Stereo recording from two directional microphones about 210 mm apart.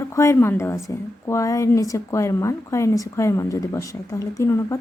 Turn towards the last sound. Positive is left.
turn(degrees=15)  # may be behind; listen again after turning